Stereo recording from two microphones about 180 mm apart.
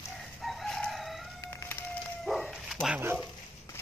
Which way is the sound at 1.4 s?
15° left (ahead or behind).